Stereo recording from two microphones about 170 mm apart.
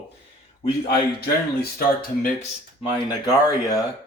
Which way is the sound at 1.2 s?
65° left (ahead or behind).